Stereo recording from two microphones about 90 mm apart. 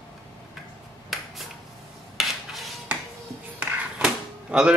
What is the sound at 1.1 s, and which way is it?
Finger snapping, centre (ahead or behind).